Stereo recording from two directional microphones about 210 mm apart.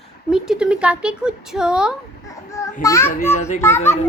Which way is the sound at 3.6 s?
10° left (ahead or behind).